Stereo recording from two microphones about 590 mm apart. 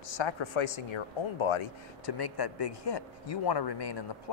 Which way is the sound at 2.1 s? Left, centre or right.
Left.